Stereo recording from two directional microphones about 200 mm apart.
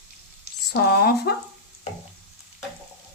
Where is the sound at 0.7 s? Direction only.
50° left (ahead or behind).